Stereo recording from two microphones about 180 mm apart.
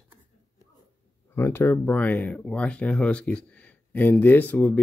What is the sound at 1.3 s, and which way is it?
Speech, 15° left (ahead or behind).